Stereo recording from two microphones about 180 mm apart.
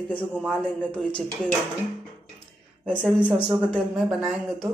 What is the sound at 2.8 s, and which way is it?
Speech, 5° left (ahead or behind).